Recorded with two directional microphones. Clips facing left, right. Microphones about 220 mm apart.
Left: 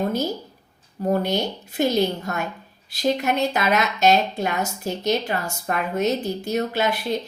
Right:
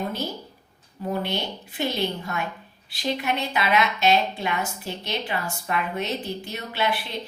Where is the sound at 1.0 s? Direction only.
45° left (ahead or behind).